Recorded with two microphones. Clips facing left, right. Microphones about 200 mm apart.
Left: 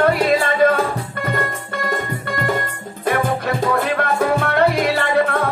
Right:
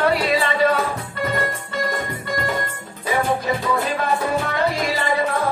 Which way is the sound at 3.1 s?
55° left (ahead or behind).